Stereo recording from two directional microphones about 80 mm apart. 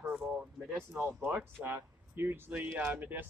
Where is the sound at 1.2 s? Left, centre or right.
Right.